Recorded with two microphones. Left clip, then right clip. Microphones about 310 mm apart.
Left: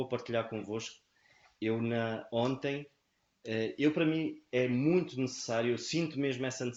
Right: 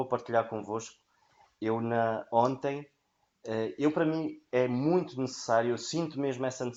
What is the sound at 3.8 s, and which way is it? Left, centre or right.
Speech, right.